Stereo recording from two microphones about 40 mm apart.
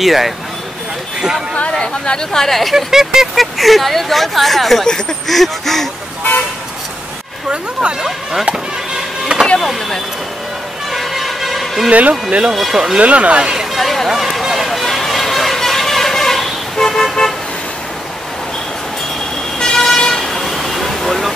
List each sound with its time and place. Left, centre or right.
0.0 s speech: centre
1.5 s speech: left
2.4 s speech: centre
2.7 s speech: centre
3.3 s speech: centre
7.4 s speech: right
9.3 s a sound: right
10.9 s music: centre
11.9 s speech: right
13.7 s speech: centre
14.0 s run: centre
19.6 s vehicle: centre